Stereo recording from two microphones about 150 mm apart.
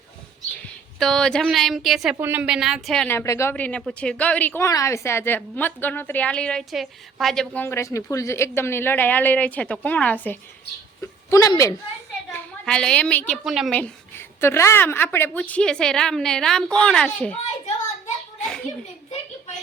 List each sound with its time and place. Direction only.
0.9 s a woman's voice: 5° left (ahead or behind)
2.1 s a woman's voice: 15° right (ahead or behind)
3.1 s a woman's voice: 15° left (ahead or behind)
12.3 s a woman's voice: 5° left (ahead or behind)
13.4 s a woman's voice: 5° right (ahead or behind)
13.7 s a woman's voice: 10° left (ahead or behind)